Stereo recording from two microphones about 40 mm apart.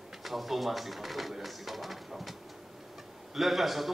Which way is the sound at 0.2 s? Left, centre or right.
Centre.